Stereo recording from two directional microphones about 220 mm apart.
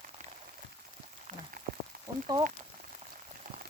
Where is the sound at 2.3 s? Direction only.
20° right (ahead or behind).